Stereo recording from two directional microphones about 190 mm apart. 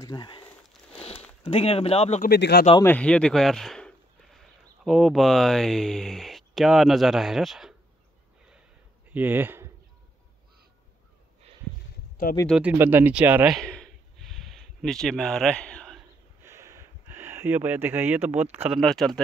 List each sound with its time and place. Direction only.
0.0 s a sound: 25° left (ahead or behind)
1.4 s speech: 30° left (ahead or behind)
2.2 s speech: 60° left (ahead or behind)
2.8 s speech: 10° left (ahead or behind)
9.1 s speech: 10° right (ahead or behind)
12.4 s speech: 5° right (ahead or behind)
16.4 s speech: 15° right (ahead or behind); by 19.2 s centre (ahead or behind)